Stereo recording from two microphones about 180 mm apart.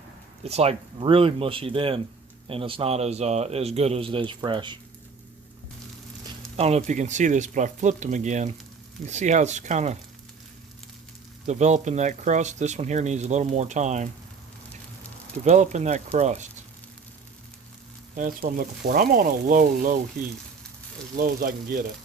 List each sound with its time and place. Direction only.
0.4 s speech: 35° right (ahead or behind)
6.6 s speech: 35° right (ahead or behind)
11.4 s speech: 40° right (ahead or behind)
15.4 s speech: 40° right (ahead or behind)
18.2 s speech: 50° right (ahead or behind)
21.2 s speech: 50° right (ahead or behind)